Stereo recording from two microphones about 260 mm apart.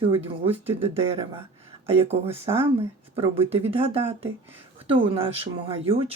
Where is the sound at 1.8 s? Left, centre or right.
Right.